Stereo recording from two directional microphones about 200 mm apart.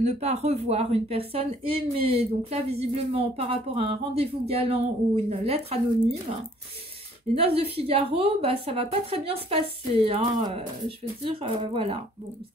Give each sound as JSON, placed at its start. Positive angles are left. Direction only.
{"t": 0.0, "sound": "a woman's voice", "side_deg": -35}
{"t": 7.3, "sound": "a woman's voice", "side_deg": -30}